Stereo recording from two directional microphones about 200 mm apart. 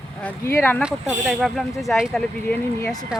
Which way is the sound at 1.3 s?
Centre (ahead or behind).